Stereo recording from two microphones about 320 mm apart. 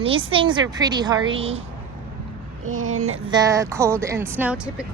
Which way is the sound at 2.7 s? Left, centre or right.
Right.